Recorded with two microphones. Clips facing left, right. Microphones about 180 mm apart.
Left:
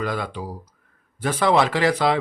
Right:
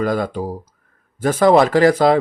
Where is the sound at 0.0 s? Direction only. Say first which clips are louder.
Right 7 dB; 45° right (ahead or behind).